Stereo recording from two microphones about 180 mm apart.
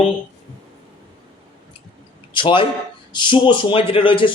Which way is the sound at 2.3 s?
25° left (ahead or behind).